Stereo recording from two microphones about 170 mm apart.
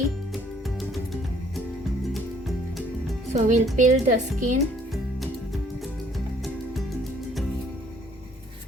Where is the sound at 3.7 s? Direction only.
50° right (ahead or behind).